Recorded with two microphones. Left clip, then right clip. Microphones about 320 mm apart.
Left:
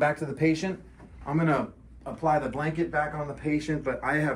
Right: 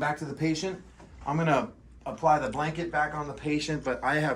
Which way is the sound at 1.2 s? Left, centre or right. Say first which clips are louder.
Even; centre.